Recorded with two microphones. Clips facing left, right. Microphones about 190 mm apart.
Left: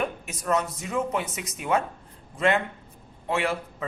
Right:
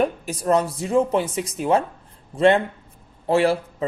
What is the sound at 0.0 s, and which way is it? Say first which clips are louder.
Speech: right 8 dB; 35° right (ahead or behind).